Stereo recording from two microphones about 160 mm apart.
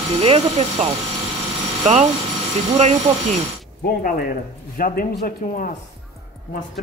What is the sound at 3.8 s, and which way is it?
Speech, 60° left (ahead or behind).